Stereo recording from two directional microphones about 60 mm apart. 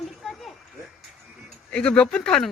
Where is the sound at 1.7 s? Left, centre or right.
Centre.